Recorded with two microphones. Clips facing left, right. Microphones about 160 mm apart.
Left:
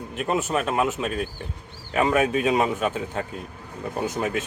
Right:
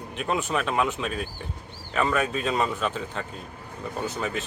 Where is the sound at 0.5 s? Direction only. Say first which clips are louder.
Left 1 dB; 5° left (ahead or behind).